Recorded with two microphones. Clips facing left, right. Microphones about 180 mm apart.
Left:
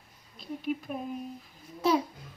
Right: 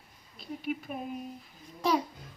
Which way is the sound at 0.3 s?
Centre (ahead or behind).